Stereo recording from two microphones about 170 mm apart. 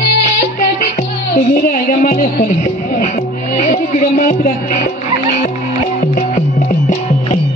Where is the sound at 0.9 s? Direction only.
50° left (ahead or behind).